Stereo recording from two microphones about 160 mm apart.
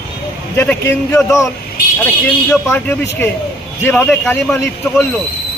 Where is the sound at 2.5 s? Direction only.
15° left (ahead or behind).